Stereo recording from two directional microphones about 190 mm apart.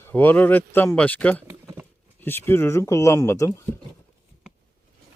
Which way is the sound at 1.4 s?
15° right (ahead or behind).